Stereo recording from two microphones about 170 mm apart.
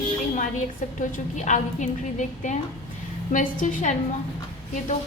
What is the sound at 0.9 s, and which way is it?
A woman's voice, 45° left (ahead or behind).